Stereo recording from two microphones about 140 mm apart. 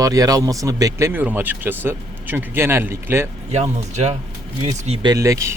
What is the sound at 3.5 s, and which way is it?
Speech, 50° right (ahead or behind).